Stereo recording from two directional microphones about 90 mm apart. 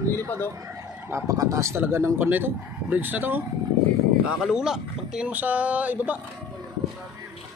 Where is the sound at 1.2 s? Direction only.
40° right (ahead or behind); by 3.4 s 20° right (ahead or behind).